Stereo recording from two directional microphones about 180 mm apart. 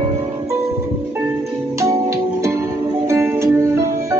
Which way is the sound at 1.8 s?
15° right (ahead or behind).